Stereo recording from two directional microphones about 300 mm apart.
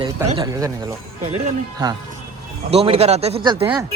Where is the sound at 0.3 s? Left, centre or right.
Centre.